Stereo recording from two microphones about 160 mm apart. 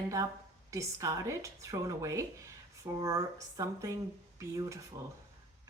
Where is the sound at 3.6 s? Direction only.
20° right (ahead or behind).